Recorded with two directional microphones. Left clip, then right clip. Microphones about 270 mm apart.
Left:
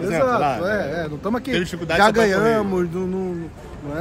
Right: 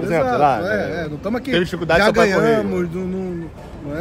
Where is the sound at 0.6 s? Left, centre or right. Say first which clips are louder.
Right 1 dB; centre.